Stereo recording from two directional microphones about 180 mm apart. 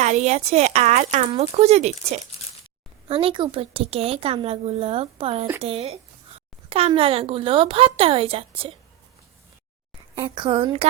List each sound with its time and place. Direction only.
0.0 s a woman's voice: 40° right (ahead or behind)
10.2 s a woman's voice: 30° right (ahead or behind)